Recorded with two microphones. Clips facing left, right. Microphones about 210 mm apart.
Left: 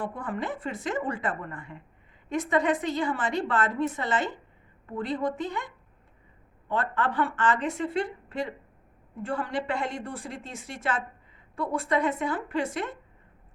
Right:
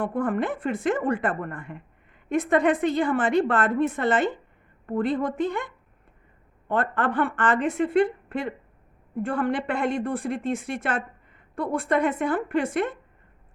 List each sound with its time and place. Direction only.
0.0 s a woman's voice: 55° right (ahead or behind)